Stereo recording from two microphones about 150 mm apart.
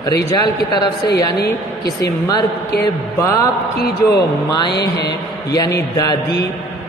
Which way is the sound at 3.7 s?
90° left.